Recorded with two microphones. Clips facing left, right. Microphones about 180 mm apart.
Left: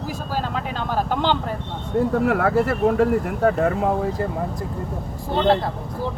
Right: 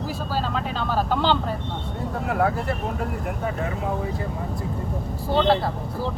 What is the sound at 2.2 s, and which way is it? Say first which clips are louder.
Speech: left 4 dB; 85° left.